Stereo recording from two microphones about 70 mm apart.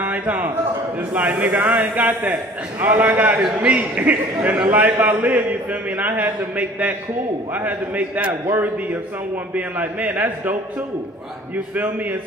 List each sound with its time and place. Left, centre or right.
0.0 s a sound: right
1.1 s a man's voice: right
9.6 s a man's voice: right
11.7 s a man's voice: right